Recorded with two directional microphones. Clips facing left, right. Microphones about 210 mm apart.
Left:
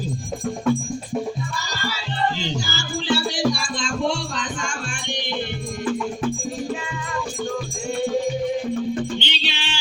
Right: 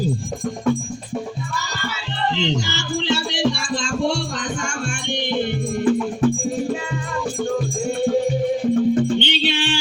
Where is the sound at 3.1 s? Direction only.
25° right (ahead or behind).